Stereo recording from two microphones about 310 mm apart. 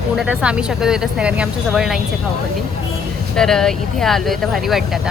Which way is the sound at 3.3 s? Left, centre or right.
Centre.